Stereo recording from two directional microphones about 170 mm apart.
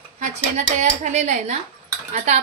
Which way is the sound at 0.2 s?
45° right (ahead or behind).